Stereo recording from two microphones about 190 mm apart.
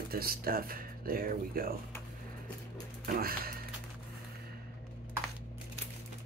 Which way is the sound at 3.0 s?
50° right (ahead or behind).